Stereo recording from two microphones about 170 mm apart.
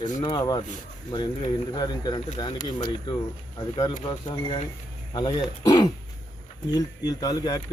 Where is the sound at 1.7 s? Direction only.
25° left (ahead or behind).